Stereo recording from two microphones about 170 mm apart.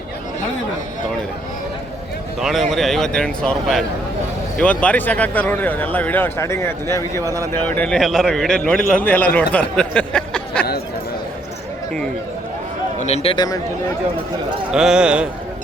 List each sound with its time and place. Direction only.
2.4 s a man's voice: centre (ahead or behind)
13.0 s a man's voice: 40° left (ahead or behind)
14.7 s a man's voice: 5° right (ahead or behind)